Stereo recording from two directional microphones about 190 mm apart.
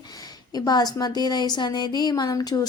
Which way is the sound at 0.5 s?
20° left (ahead or behind).